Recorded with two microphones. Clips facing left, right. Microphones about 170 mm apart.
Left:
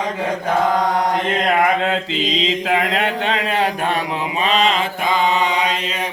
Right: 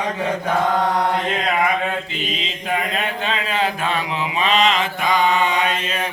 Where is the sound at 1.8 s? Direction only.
85° left; by 4.0 s 65° left (ahead or behind).